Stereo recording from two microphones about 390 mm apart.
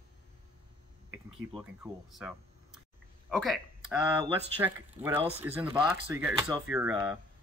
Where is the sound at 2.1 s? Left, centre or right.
Centre.